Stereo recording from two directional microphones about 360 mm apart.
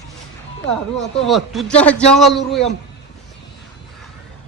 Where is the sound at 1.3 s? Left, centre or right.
Centre.